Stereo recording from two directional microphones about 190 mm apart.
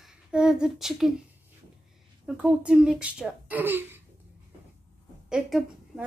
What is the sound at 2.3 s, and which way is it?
Speech, 5° right (ahead or behind).